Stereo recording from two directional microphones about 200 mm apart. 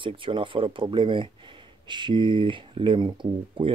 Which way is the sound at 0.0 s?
25° right (ahead or behind).